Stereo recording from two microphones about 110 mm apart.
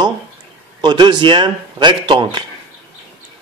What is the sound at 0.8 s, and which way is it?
A man's voice, 45° right (ahead or behind).